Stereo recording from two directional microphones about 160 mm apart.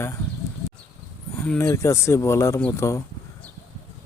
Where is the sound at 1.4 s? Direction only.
10° left (ahead or behind).